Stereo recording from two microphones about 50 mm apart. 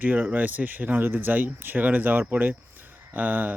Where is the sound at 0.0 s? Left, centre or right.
Right.